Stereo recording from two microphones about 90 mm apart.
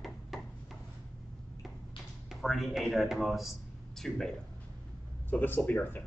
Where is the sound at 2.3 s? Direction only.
Centre (ahead or behind).